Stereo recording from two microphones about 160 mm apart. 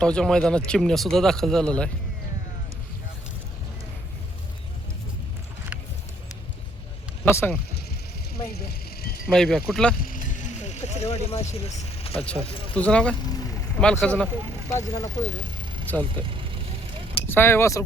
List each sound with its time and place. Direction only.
0.0 s speech: 5° left (ahead or behind)
7.3 s speech: 15° left (ahead or behind)
8.5 s vehicle: 70° left (ahead or behind)
9.2 s speech: 5° left (ahead or behind)
10.0 s vehicle: 55° left (ahead or behind); by 12.2 s 40° left (ahead or behind)
12.5 s speech: 35° left (ahead or behind)
12.7 s speech: 5° left (ahead or behind)
14.7 s speech: 20° left (ahead or behind)
16.1 s speech: 30° right (ahead or behind)
17.2 s speech: 15° left (ahead or behind)